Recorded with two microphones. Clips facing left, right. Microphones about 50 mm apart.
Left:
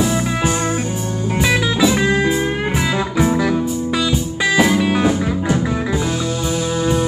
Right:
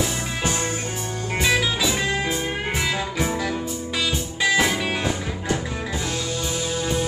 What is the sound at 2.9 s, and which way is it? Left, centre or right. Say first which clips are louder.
Music: left 7 dB; centre.